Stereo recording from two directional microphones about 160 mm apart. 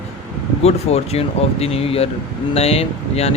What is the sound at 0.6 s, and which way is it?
Speech, 40° left (ahead or behind).